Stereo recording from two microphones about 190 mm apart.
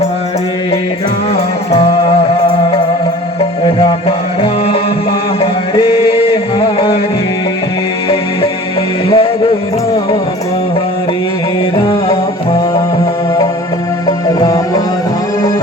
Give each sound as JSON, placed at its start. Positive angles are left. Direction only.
{"t": 5.4, "sound": "chant", "side_deg": 30}
{"t": 6.1, "sound": "music", "side_deg": 30}
{"t": 9.0, "sound": "music", "side_deg": 30}